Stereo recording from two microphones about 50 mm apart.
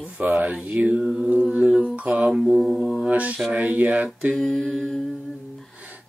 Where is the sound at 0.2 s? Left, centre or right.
Right.